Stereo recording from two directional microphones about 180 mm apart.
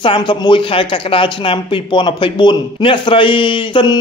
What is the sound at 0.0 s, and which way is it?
Speech, 25° left (ahead or behind).